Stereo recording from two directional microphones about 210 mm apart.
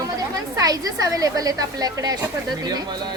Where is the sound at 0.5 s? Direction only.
15° right (ahead or behind).